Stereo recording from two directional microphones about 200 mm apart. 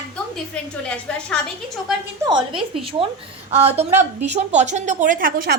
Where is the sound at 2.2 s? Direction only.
25° right (ahead or behind).